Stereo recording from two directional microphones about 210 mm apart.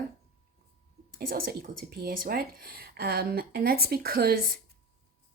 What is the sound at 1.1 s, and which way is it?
Speech, 45° right (ahead or behind).